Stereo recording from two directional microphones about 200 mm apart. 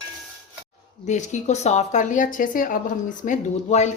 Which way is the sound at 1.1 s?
35° left (ahead or behind).